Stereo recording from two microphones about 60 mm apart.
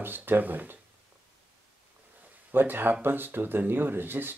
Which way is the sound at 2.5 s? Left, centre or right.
Right.